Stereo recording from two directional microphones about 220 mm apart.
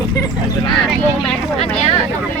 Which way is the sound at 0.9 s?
Centre (ahead or behind).